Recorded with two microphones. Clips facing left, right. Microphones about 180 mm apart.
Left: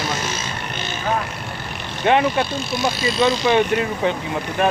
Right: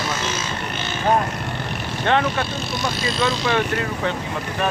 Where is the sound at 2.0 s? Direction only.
15° left (ahead or behind).